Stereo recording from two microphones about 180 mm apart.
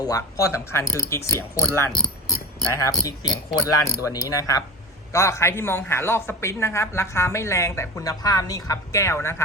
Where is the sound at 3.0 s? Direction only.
20° left (ahead or behind).